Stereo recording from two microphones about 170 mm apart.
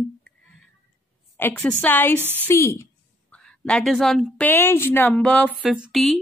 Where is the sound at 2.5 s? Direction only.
15° left (ahead or behind).